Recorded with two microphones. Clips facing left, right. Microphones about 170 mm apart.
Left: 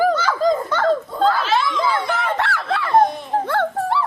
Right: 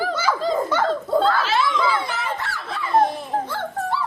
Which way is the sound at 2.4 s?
70° left (ahead or behind).